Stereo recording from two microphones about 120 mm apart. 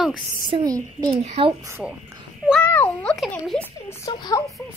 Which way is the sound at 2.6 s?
15° left (ahead or behind).